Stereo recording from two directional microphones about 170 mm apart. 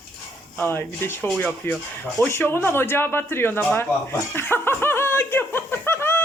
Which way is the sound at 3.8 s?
15° left (ahead or behind).